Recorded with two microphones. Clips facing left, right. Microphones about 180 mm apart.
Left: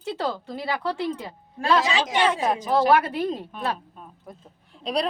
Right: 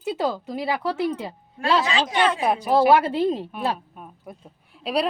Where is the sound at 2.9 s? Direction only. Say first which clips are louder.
Right 3 dB; 25° right (ahead or behind).